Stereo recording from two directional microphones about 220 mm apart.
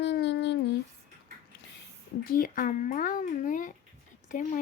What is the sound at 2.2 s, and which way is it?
A child's voice, 40° left (ahead or behind).